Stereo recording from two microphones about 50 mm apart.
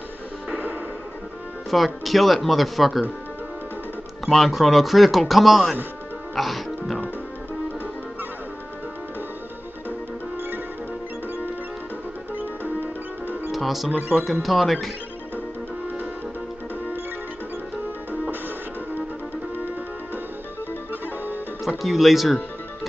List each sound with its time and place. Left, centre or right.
1.7 s speech: centre
4.3 s speech: centre
6.3 s music: centre
12.4 s music: right
13.5 s music: centre
14.4 s speech: centre
20.9 s music: right
21.6 s speech: centre